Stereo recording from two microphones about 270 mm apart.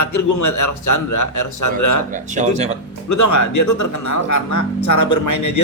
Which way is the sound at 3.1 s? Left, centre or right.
Left.